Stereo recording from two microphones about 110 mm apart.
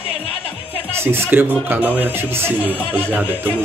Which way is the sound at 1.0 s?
20° right (ahead or behind).